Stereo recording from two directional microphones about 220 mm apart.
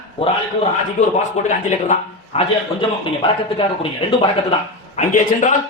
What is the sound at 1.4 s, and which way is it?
Speech, 30° left (ahead or behind).